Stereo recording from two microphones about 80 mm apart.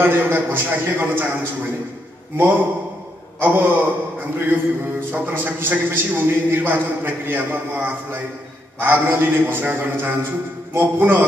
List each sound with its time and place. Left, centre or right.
0.0 s a man's voice: right